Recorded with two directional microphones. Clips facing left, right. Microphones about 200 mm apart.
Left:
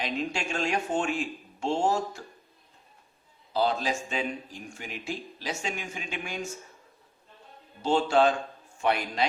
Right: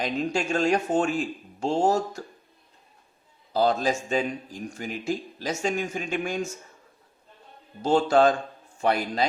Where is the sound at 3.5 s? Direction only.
45° right (ahead or behind).